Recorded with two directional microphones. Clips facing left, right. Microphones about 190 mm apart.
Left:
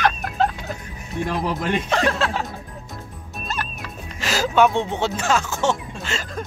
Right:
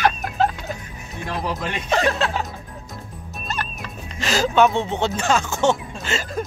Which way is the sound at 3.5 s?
5° left (ahead or behind).